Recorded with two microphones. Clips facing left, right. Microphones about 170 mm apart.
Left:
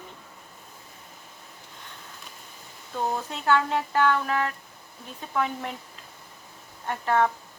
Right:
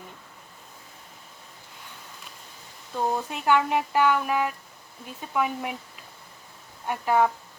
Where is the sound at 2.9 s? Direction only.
10° right (ahead or behind).